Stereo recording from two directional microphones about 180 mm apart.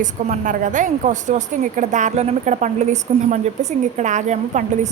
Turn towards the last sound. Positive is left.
turn(degrees=-40)  # may be behind; listen again after turning